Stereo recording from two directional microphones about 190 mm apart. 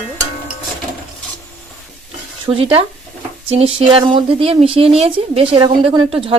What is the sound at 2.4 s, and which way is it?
Speech, 30° right (ahead or behind).